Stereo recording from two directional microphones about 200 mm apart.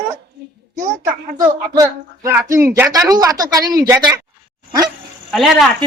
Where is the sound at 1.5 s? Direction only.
20° right (ahead or behind).